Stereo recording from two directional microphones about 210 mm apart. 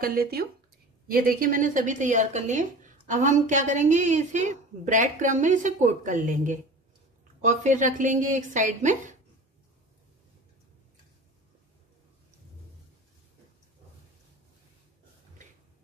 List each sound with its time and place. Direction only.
0.0 s speech: 45° right (ahead or behind)